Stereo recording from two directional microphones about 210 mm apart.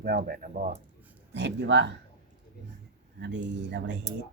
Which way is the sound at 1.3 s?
55° right (ahead or behind).